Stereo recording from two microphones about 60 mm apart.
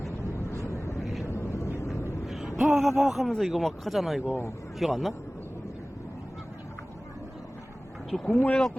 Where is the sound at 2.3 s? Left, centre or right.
Centre.